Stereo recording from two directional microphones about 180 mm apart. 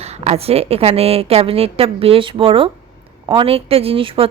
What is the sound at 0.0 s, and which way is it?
A woman's voice, 35° right (ahead or behind).